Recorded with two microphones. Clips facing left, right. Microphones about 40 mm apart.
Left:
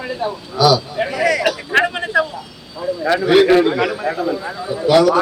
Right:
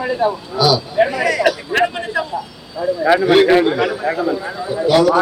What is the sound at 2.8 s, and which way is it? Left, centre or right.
A man's voice, centre.